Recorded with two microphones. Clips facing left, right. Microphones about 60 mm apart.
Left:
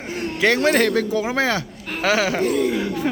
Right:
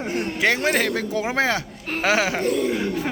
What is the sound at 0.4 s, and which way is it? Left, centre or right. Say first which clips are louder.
Speech: left 4 dB; centre.